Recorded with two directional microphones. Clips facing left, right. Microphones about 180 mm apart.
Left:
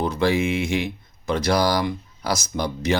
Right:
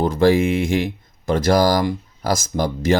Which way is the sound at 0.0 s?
45° right (ahead or behind).